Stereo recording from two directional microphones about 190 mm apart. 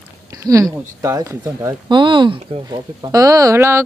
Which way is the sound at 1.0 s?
15° right (ahead or behind).